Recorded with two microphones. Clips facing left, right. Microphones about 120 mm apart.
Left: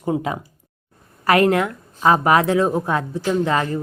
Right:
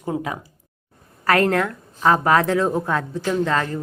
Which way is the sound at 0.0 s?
20° left (ahead or behind).